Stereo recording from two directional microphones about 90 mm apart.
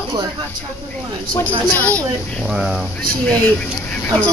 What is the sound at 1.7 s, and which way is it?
Speech, 20° left (ahead or behind).